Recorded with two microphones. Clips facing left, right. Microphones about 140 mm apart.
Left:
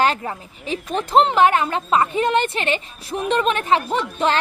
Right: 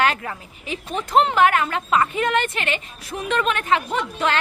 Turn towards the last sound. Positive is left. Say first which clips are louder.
# left 2 dB
turn(degrees=30)  # may be behind; listen again after turning